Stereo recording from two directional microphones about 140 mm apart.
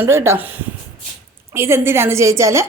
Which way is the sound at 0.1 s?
20° right (ahead or behind).